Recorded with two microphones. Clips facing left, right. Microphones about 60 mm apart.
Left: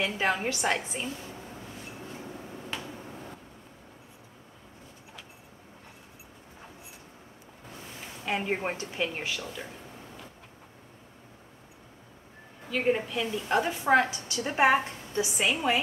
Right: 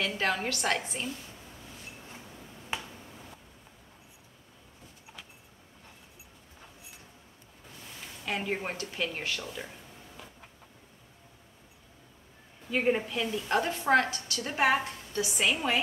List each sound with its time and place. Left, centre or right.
0.0 s a woman's voice: centre
2.7 s finger snapping: centre
8.3 s a woman's voice: centre
12.7 s a woman's voice: centre
14.2 s a woman's voice: left
15.7 s a woman's voice: centre